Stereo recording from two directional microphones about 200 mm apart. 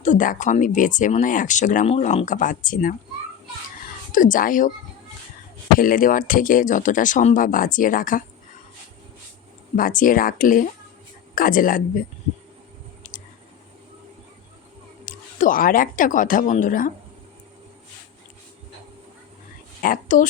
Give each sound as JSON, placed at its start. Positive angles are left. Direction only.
{"t": 0.0, "sound": "speech", "side_deg": 40}
{"t": 4.1, "sound": "speech", "side_deg": 40}
{"t": 5.8, "sound": "speech", "side_deg": 45}
{"t": 9.7, "sound": "speech", "side_deg": 45}
{"t": 13.0, "sound": "a sound", "side_deg": 40}
{"t": 15.0, "sound": "speech", "side_deg": 40}
{"t": 19.8, "sound": "speech", "side_deg": 45}